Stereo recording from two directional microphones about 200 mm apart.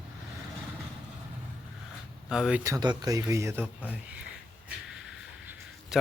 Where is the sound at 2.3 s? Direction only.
5° right (ahead or behind).